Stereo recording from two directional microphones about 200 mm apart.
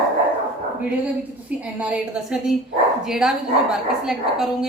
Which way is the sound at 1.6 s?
5° right (ahead or behind).